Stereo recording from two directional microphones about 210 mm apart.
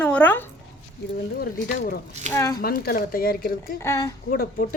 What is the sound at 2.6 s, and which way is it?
Speech, 45° left (ahead or behind).